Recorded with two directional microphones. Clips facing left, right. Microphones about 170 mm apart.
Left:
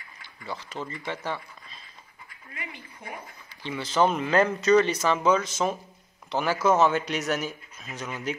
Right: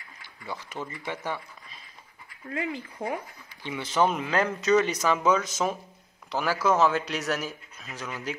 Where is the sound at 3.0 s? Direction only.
90° right.